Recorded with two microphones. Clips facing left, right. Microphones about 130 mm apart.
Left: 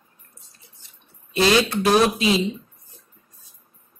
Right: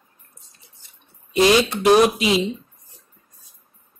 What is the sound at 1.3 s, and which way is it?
Speech, 15° right (ahead or behind).